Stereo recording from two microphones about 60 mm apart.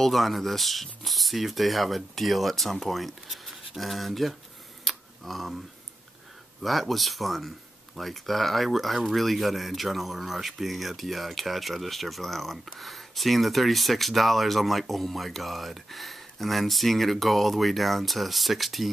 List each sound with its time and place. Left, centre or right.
0.0 s speech: centre
4.8 s a sound: centre
6.6 s speech: centre